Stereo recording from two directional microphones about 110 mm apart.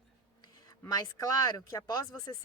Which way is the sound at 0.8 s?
35° left (ahead or behind).